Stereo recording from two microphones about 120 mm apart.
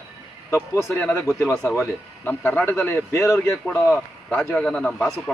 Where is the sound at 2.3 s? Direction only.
20° left (ahead or behind).